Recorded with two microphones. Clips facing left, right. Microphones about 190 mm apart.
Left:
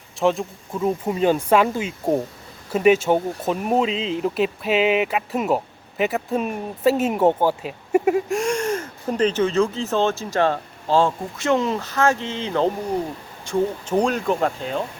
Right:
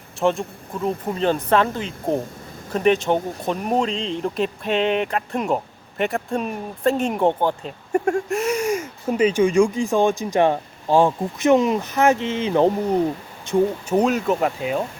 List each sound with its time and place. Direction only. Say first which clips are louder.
0.2 s speech: even; centre (ahead or behind); by 13.6 s 20° right (ahead or behind)
13.8 s speech: right 1 dB; 5° right (ahead or behind)